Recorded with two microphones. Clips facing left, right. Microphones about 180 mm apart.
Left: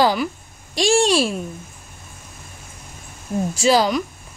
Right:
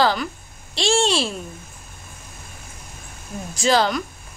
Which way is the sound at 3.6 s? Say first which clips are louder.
Left 2 dB; 10° left (ahead or behind).